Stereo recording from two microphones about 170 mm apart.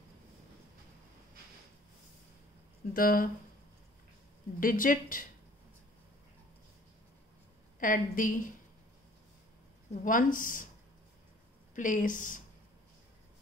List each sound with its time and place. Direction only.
2.9 s speech: 55° left (ahead or behind)
4.6 s speech: 55° left (ahead or behind)
7.8 s speech: 55° left (ahead or behind)
10.0 s speech: 50° left (ahead or behind)
11.7 s speech: 50° left (ahead or behind)